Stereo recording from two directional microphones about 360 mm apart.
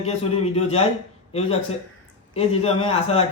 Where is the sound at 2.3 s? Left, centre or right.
Centre.